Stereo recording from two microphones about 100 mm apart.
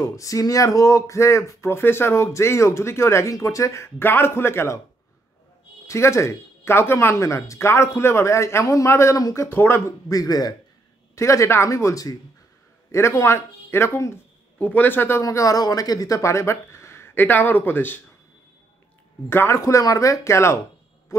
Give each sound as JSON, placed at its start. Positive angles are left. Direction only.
{"t": 0.0, "sound": "speech", "side_deg": 35}
{"t": 5.9, "sound": "speech", "side_deg": 30}
{"t": 11.1, "sound": "speech", "side_deg": 30}
{"t": 14.6, "sound": "speech", "side_deg": 15}
{"t": 19.2, "sound": "speech", "side_deg": 25}